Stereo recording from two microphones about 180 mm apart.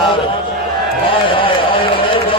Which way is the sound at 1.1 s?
30° left (ahead or behind).